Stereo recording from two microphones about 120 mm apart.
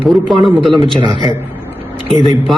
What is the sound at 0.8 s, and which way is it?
Speech, 40° right (ahead or behind).